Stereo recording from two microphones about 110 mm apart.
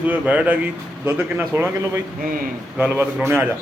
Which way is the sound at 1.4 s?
25° right (ahead or behind).